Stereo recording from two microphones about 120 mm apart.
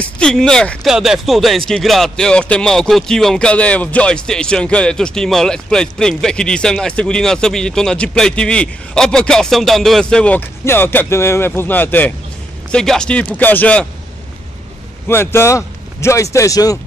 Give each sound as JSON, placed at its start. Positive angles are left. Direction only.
{"t": 0.0, "sound": "speech", "side_deg": 5}
{"t": 15.0, "sound": "speech", "side_deg": 20}